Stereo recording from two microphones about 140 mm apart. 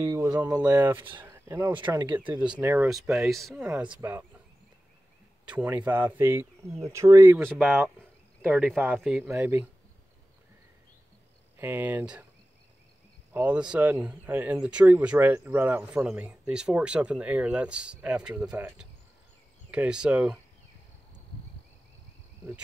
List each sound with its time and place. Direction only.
0.0 s speech: 25° right (ahead or behind)
2.9 s speech: centre (ahead or behind)
3.5 s speech: 10° right (ahead or behind)
5.5 s speech: 10° right (ahead or behind)
11.5 s speech: 15° right (ahead or behind)
13.3 s speech: 10° right (ahead or behind)